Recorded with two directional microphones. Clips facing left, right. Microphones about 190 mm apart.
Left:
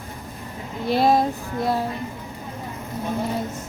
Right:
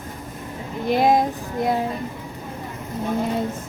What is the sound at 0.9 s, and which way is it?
Child singing, 15° right (ahead or behind).